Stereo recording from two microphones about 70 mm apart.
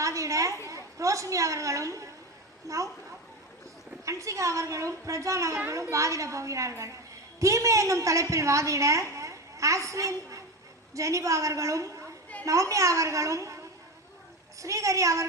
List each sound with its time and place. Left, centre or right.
0.0 s a sound: right
0.7 s a woman's voice: right
4.0 s a woman's voice: right
9.1 s a sound: right
10.9 s a woman's voice: right
14.6 s a woman's voice: right